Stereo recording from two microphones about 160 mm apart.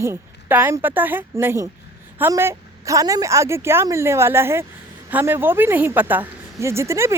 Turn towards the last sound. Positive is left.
turn(degrees=-15)  # may be behind; listen again after turning